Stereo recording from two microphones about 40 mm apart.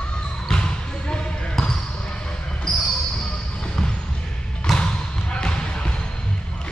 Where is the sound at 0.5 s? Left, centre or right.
Left.